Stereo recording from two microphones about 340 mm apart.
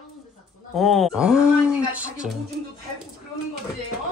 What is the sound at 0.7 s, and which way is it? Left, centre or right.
Speech, centre.